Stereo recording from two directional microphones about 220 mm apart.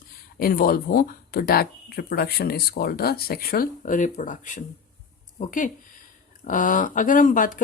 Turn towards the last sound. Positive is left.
turn(degrees=35)  # may be behind; listen again after turning